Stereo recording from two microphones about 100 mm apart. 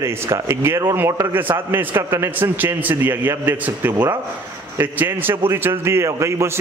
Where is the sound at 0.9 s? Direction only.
25° right (ahead or behind).